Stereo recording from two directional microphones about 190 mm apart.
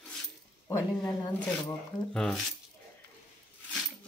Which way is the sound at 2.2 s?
5° left (ahead or behind).